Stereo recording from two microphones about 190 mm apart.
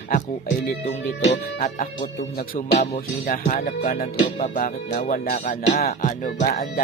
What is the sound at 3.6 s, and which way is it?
Speech, 45° left (ahead or behind).